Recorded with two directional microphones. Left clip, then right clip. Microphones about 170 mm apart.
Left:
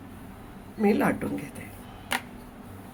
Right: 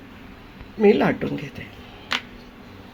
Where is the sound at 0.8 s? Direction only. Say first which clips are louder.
Right 7 dB; 35° right (ahead or behind).